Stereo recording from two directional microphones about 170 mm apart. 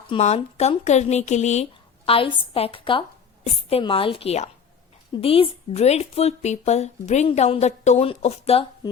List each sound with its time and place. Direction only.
0.1 s speech: 40° left (ahead or behind)
2.0 s speech: 30° left (ahead or behind)